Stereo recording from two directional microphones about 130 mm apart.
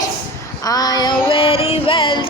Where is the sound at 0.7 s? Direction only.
30° left (ahead or behind).